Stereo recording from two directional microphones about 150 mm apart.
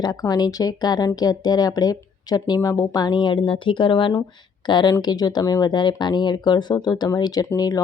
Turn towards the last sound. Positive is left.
turn(degrees=25)  # may be behind; listen again after turning